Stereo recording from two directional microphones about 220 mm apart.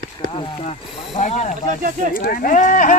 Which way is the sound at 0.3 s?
30° left (ahead or behind).